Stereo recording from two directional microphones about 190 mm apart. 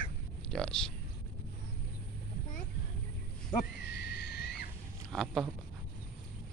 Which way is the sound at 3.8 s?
60° left (ahead or behind).